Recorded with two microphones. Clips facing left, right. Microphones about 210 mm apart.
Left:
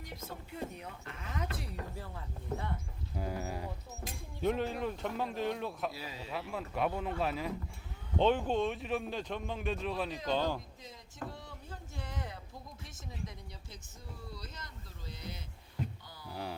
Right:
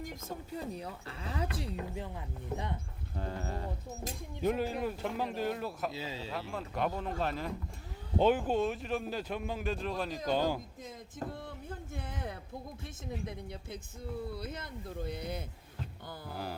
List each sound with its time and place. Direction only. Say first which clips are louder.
0.3 s speech: right 2 dB; 35° right (ahead or behind)
1.7 s speech: right 4 dB; 15° right (ahead or behind)
3.2 s speech: even; 5° left (ahead or behind)
5.9 s speech: right 4 dB; 25° right (ahead or behind)
6.5 s speech: left 1 dB; 5° left (ahead or behind)
11.3 s a sound: right 5 dB; 55° right (ahead or behind)
12.8 s speech: right 4 dB; 55° right (ahead or behind)
16.3 s speech: even; centre (ahead or behind)